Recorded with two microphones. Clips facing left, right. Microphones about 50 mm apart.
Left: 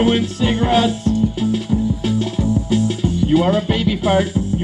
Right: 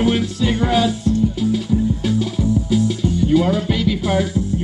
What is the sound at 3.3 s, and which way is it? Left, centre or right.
Speech, centre.